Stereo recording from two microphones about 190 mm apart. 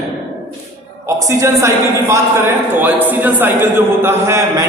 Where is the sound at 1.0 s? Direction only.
15° right (ahead or behind).